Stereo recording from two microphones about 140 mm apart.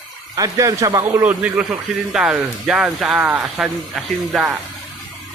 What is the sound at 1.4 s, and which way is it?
Speech, 5° right (ahead or behind).